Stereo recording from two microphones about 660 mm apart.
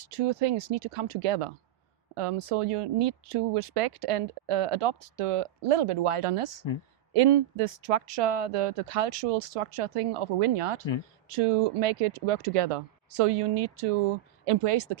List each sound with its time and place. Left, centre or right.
0.0 s speech: right